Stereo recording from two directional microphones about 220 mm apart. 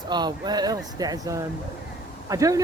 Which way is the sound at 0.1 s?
20° right (ahead or behind).